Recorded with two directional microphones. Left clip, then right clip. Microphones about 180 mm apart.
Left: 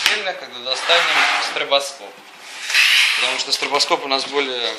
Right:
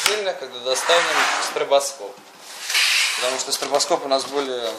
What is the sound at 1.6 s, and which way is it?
Speech, 50° right (ahead or behind).